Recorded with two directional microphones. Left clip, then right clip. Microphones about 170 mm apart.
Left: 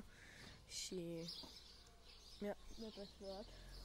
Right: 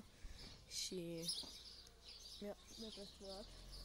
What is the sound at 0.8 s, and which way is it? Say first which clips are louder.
Speech: left 1 dB; centre (ahead or behind).